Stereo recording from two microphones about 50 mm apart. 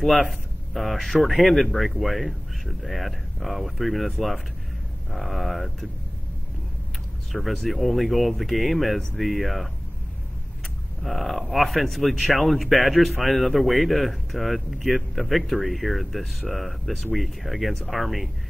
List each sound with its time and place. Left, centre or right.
0.0 s speech: centre
7.4 s speech: centre
11.0 s speech: centre